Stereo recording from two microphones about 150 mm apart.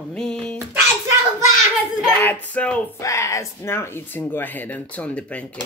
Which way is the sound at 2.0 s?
10° left (ahead or behind).